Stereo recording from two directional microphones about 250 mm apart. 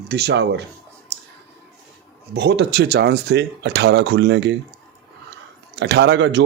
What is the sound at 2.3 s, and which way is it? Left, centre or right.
Speech, right.